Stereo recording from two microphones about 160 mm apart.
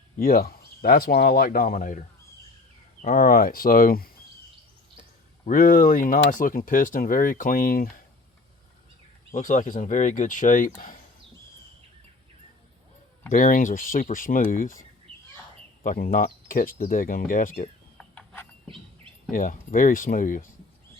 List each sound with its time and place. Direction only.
0.2 s speech: 65° left (ahead or behind)
5.5 s speech: 55° left (ahead or behind)
9.3 s speech: 50° left (ahead or behind)
13.3 s speech: 60° left (ahead or behind)
15.1 s bird: 35° right (ahead or behind)
15.8 s speech: 60° left (ahead or behind)
17.9 s a sound: 5° left (ahead or behind)
19.3 s speech: 60° left (ahead or behind)